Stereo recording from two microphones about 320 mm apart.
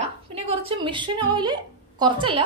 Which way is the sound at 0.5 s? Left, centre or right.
Centre.